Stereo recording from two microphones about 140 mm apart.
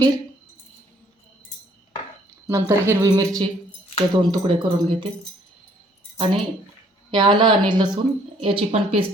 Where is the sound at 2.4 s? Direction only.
20° right (ahead or behind); by 5.1 s 35° right (ahead or behind).